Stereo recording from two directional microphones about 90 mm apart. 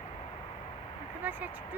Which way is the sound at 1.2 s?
20° right (ahead or behind).